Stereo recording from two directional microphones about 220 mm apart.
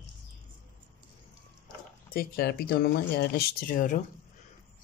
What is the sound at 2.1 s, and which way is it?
Speech, 45° left (ahead or behind).